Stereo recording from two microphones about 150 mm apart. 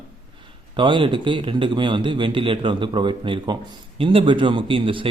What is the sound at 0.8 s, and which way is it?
Speech, 30° right (ahead or behind).